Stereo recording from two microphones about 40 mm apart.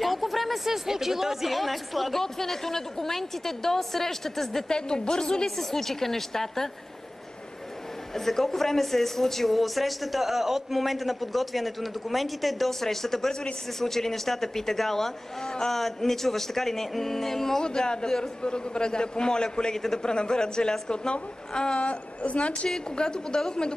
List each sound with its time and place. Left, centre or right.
0.0 s a sound: centre
0.7 s a woman's voice: centre
4.6 s a man's voice: centre
8.1 s a woman's voice: centre
17.6 s a man's voice: centre
21.7 s a woman's voice: left
22.8 s a man's voice: centre